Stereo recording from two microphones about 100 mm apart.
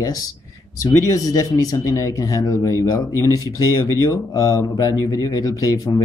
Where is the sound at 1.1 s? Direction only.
35° left (ahead or behind).